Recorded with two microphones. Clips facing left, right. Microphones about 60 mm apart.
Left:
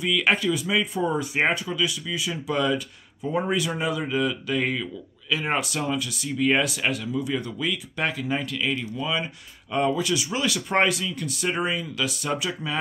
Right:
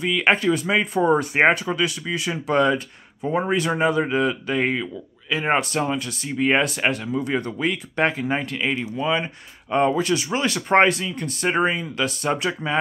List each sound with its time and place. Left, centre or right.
0.0 s speech: right
0.4 s speech: right
5.6 s speech: right